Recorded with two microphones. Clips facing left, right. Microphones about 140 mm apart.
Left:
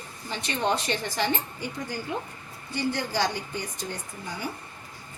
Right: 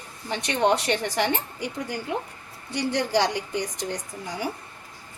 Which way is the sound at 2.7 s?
75° right (ahead or behind).